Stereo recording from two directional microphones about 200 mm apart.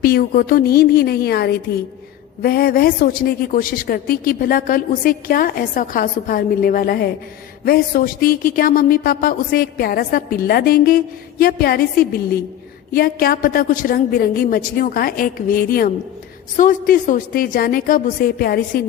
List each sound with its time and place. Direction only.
0.0 s speech: 45° left (ahead or behind)